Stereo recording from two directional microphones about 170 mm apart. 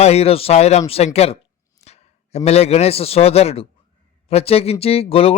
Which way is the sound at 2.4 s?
40° left (ahead or behind).